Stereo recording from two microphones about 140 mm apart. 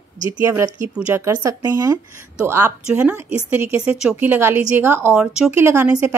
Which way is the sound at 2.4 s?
15° right (ahead or behind).